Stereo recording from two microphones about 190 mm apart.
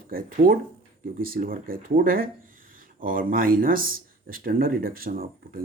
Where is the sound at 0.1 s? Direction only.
45° right (ahead or behind).